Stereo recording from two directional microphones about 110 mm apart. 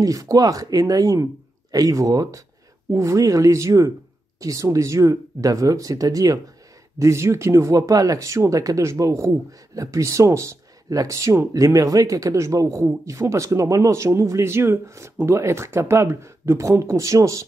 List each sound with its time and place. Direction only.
0.0 s speech: 30° right (ahead or behind)